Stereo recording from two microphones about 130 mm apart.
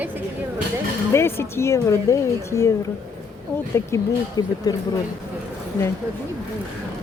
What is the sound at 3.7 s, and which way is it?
Speech, 25° left (ahead or behind).